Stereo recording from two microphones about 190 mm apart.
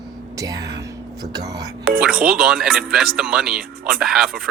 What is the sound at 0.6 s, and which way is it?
Speech, 60° right (ahead or behind).